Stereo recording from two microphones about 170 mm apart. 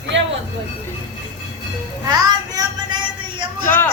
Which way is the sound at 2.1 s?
25° right (ahead or behind).